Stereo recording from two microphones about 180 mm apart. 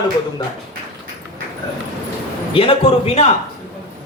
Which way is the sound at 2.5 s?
30° left (ahead or behind).